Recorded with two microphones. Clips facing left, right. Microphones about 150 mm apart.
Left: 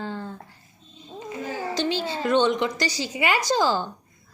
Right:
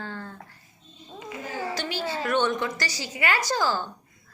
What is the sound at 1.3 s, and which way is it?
A woman's voice, 25° left (ahead or behind).